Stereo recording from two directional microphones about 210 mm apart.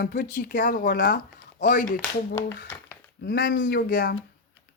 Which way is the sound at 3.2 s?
45° left (ahead or behind).